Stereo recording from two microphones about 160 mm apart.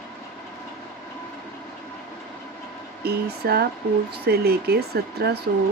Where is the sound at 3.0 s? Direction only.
85° right.